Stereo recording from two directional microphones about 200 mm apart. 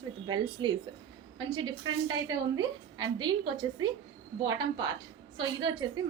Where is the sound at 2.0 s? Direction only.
20° right (ahead or behind).